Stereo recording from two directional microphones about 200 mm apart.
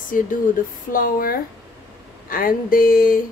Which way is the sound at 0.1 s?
40° left (ahead or behind).